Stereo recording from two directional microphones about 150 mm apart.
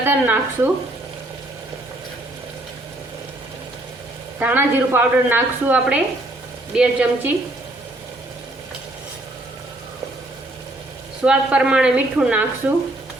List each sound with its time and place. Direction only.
0.0 s a woman's voice: 15° right (ahead or behind)
4.4 s a woman's voice: 10° right (ahead or behind)
11.3 s a woman's voice: 5° right (ahead or behind)